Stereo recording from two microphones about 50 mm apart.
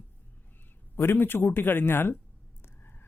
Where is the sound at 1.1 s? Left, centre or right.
Left.